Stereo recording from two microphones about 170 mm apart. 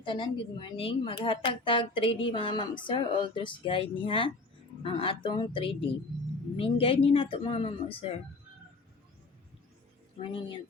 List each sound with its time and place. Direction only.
0.0 s a woman's voice: 30° left (ahead or behind)
10.2 s a woman's voice: 30° left (ahead or behind)